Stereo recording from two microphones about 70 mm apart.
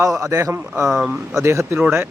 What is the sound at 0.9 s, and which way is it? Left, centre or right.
Speech, centre.